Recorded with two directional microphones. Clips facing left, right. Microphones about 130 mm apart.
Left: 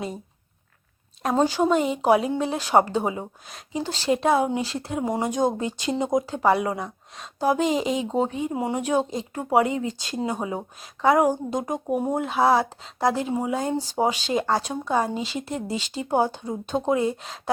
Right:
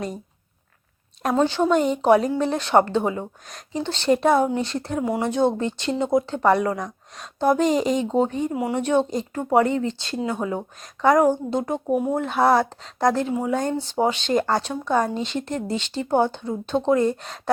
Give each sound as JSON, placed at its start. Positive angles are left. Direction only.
{"t": 1.5, "sound": "speech", "side_deg": 5}
{"t": 4.9, "sound": "speech", "side_deg": 20}